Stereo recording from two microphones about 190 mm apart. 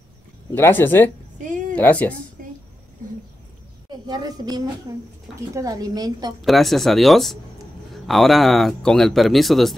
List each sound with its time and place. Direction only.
0.6 s speech: 10° left (ahead or behind)
3.9 s a woman's voice: 20° right (ahead or behind)
6.4 s speech: centre (ahead or behind)